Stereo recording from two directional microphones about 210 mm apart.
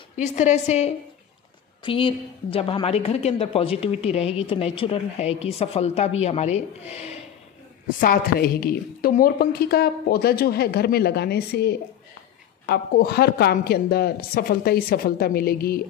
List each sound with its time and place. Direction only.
0.1 s a woman's voice: 35° left (ahead or behind)
8.0 s a woman's voice: 45° left (ahead or behind)